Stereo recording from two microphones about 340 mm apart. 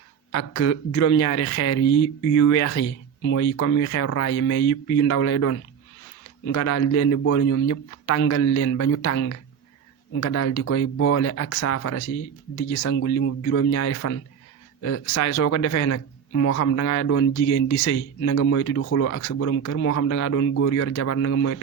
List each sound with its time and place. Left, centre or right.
0.3 s speech: left